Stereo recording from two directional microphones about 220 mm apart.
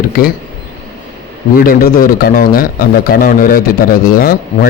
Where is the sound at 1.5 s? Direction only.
40° left (ahead or behind).